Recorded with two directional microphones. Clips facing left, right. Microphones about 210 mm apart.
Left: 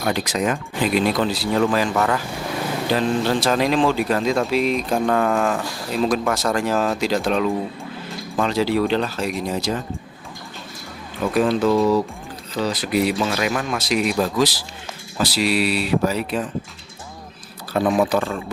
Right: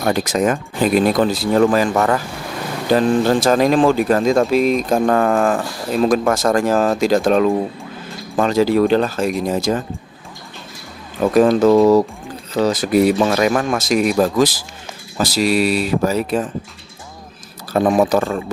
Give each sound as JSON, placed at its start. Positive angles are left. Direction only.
{"t": 0.0, "sound": "speech", "side_deg": -45}
{"t": 11.3, "sound": "speech", "side_deg": -45}
{"t": 17.7, "sound": "speech", "side_deg": -45}